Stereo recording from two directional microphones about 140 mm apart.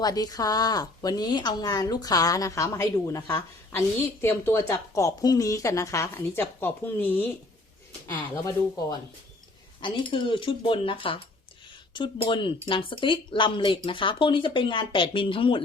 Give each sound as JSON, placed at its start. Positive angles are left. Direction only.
{"t": 0.0, "sound": "a woman's voice", "side_deg": 25}
{"t": 9.8, "sound": "speech", "side_deg": 35}